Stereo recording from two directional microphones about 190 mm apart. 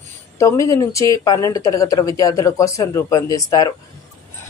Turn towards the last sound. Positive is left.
turn(degrees=20)  # may be behind; listen again after turning